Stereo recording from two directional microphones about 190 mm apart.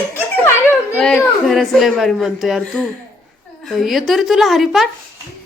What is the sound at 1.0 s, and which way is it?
Speech, 5° left (ahead or behind).